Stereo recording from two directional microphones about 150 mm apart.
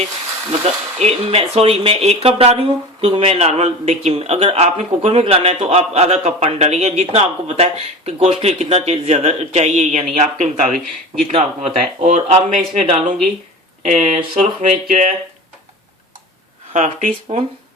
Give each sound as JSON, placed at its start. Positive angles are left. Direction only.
{"t": 0.6, "sound": "speech", "side_deg": -45}
{"t": 10.8, "sound": "speech", "side_deg": 5}
{"t": 11.3, "sound": "speech", "side_deg": -40}
{"t": 11.7, "sound": "speech", "side_deg": -55}
{"t": 16.7, "sound": "speech", "side_deg": -55}
{"t": 17.1, "sound": "speech", "side_deg": -35}